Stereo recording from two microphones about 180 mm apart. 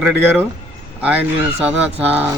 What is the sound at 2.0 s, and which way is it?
Speech, 10° right (ahead or behind).